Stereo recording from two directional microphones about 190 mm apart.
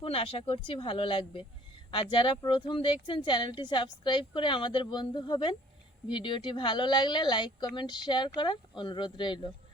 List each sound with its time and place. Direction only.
0.0 s speech: 30° left (ahead or behind)